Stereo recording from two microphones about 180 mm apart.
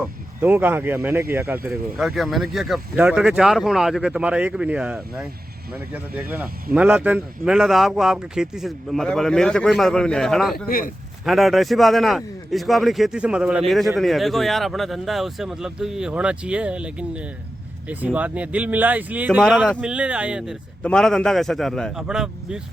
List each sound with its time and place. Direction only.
0.0 s speech: 10° right (ahead or behind)
10.7 s speech: 50° left (ahead or behind)
11.3 s speech: centre (ahead or behind)